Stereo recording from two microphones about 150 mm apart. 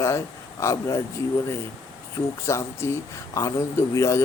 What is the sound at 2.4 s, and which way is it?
Speech, 20° left (ahead or behind).